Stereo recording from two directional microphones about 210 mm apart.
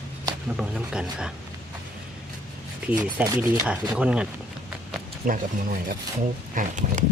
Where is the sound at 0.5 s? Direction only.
Centre (ahead or behind).